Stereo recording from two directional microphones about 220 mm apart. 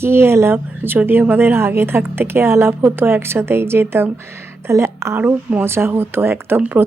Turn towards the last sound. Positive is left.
turn(degrees=-10)  # may be behind; listen again after turning